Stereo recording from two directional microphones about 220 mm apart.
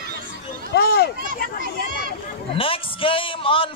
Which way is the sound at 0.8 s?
45° left (ahead or behind).